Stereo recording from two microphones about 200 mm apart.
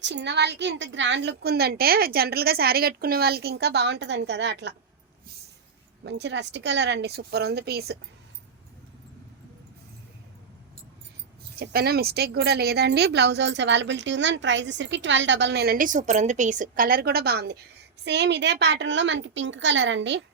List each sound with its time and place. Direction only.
0.0 s a woman's voice: 60° right (ahead or behind)
6.1 s a woman's voice: 55° right (ahead or behind)
11.6 s a woman's voice: 50° right (ahead or behind)